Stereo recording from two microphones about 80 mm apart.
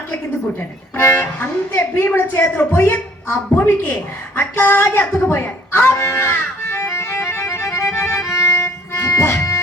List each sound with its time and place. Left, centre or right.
0.9 s speech: left
5.3 s music: left
8.5 s dog: left